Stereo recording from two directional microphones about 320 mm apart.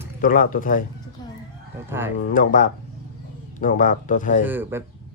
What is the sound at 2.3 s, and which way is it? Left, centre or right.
Speech, left.